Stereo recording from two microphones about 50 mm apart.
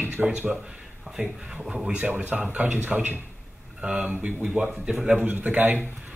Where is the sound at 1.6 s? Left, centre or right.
Centre.